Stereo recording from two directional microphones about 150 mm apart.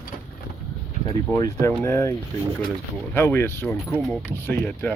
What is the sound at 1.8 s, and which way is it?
Speech, 15° left (ahead or behind).